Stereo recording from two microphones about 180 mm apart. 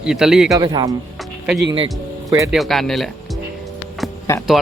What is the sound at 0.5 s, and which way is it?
Speech, 25° right (ahead or behind).